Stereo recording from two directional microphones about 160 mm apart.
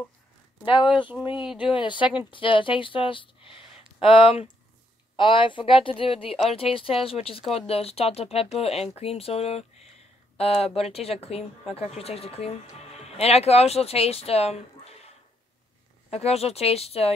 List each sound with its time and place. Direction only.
0.7 s speech: 30° left (ahead or behind)
1.3 s speech: 5° right (ahead or behind)
1.7 s speech: 30° left (ahead or behind)
16.1 s speech: 40° left (ahead or behind)